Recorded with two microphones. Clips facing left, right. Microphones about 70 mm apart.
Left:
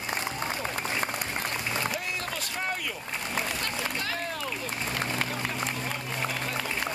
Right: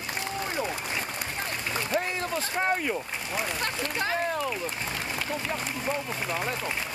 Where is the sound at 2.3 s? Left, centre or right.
Right.